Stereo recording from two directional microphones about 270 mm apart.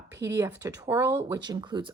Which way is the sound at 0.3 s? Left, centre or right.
Centre.